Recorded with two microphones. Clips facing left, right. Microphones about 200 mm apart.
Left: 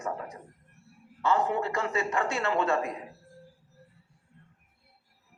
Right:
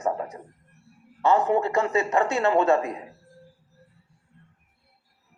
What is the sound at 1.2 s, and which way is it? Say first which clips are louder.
A man's voice: right 6 dB; 20° right (ahead or behind).